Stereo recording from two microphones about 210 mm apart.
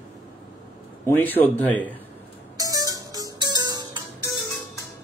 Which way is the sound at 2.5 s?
15° right (ahead or behind).